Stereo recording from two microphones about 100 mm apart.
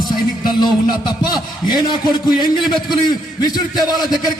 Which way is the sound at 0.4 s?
45° left (ahead or behind).